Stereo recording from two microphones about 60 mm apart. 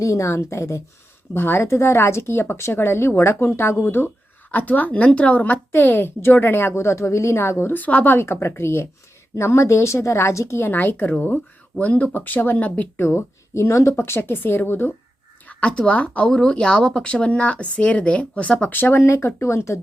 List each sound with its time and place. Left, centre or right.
0.0 s a woman's voice: left
1.3 s speech: left
4.5 s a woman's voice: left
7.7 s speech: left
10.6 s a woman's voice: left
11.8 s speech: left
13.0 s speech: left
14.0 s a woman's voice: left
15.4 s speech: centre
16.3 s speech: centre
18.7 s a woman's voice: left
19.0 s speech: left